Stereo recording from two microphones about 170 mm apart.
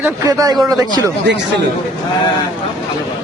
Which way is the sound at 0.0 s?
20° right (ahead or behind).